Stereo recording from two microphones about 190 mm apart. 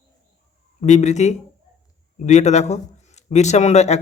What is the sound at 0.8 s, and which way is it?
Speech, 40° left (ahead or behind).